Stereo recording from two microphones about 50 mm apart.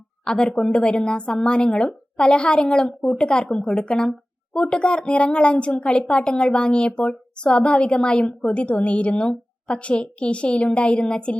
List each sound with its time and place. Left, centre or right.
0.3 s a woman's voice: centre